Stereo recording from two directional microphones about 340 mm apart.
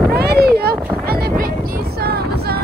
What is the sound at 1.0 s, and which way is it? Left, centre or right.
Vehicle, right.